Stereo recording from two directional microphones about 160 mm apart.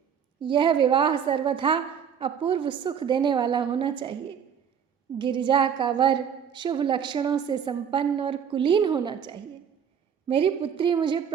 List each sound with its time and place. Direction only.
0.3 s a woman's voice: 30° right (ahead or behind)